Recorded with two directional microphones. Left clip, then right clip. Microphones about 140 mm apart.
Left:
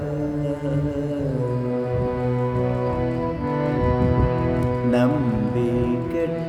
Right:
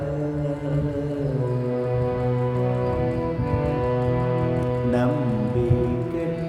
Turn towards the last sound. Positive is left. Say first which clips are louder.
# left 2 dB
turn(degrees=40)  # may be behind; listen again after turning